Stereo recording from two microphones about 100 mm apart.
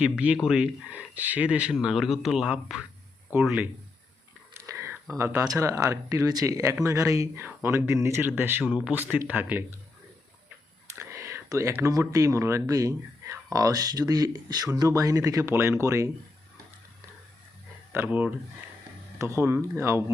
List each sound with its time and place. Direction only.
0.0 s speech: 15° right (ahead or behind)
4.5 s a sound: 30° right (ahead or behind)
5.4 s speech: 30° right (ahead or behind)
10.8 s whispering: 25° right (ahead or behind)
11.8 s speech: 30° right (ahead or behind)
17.9 s speech: 15° right (ahead or behind)
19.2 s speech: 30° right (ahead or behind)